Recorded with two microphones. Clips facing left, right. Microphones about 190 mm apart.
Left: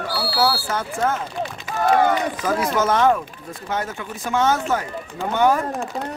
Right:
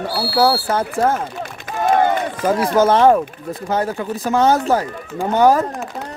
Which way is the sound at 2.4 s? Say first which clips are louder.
Right 8 dB; 30° right (ahead or behind).